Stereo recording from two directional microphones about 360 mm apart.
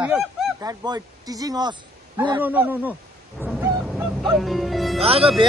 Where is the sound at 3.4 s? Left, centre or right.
Centre.